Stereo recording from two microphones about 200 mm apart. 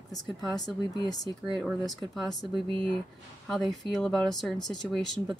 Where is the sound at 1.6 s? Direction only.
Centre (ahead or behind).